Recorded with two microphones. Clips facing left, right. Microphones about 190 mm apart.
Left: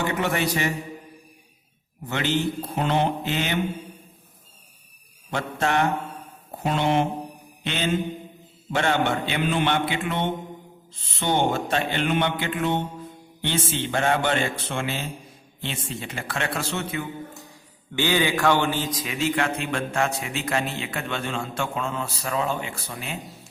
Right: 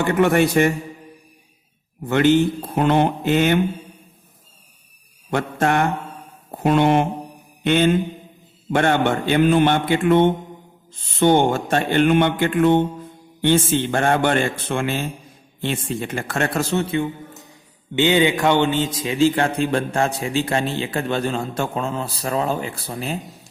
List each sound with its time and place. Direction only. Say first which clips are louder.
0.1 s a man's voice: right 9 dB; 50° right (ahead or behind)
2.0 s a man's voice: right 9 dB; 50° right (ahead or behind)
5.3 s a man's voice: right 5 dB; 50° right (ahead or behind)
7.6 s mantra: right 12 dB; 55° right (ahead or behind)
8.7 s a man's voice: right 5 dB; 50° right (ahead or behind)
16.9 s a man's voice: right 8 dB; 25° right (ahead or behind)